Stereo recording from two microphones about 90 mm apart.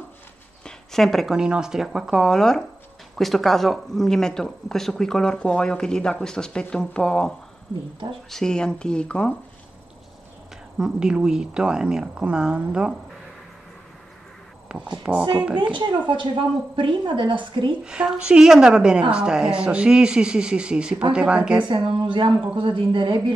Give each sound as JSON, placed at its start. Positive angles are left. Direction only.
{"t": 0.7, "sound": "speech", "side_deg": 5}
{"t": 10.8, "sound": "a woman's voice", "side_deg": -10}
{"t": 14.7, "sound": "a woman's voice", "side_deg": -10}
{"t": 16.1, "sound": "a woman's voice", "side_deg": -65}
{"t": 17.8, "sound": "a woman's voice", "side_deg": -10}
{"t": 21.6, "sound": "a woman's voice", "side_deg": -60}